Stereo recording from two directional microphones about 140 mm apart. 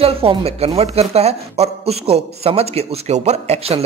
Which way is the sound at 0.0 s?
45° right (ahead or behind).